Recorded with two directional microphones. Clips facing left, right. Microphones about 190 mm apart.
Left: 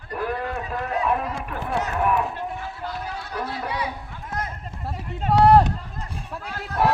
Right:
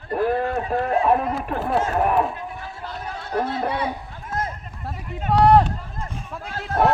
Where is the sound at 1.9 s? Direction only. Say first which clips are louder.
Right 1 dB; 40° right (ahead or behind).